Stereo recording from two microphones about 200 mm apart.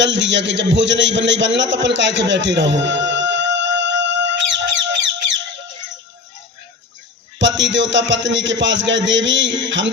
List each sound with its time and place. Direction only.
0.0 s a man's voice: 65° right (ahead or behind)
7.3 s a man's voice: 65° right (ahead or behind)